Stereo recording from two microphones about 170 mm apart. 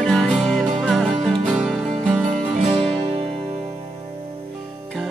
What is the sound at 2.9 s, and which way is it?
Music, 35° right (ahead or behind).